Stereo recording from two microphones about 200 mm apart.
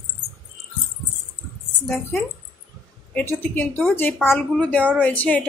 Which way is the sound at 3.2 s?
10° left (ahead or behind).